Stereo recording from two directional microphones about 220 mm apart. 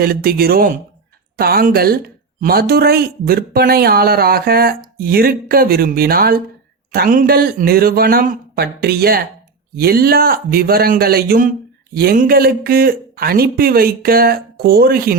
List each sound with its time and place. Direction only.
0.0 s a man's voice: 40° right (ahead or behind)